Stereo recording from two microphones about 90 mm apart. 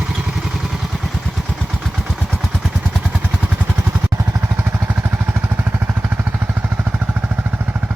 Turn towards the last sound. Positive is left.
turn(degrees=-20)  # may be behind; listen again after turning